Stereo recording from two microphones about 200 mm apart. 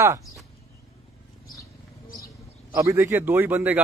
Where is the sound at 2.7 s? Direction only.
15° right (ahead or behind).